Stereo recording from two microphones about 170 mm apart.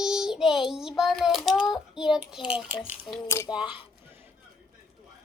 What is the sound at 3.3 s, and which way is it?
Speech, 15° left (ahead or behind).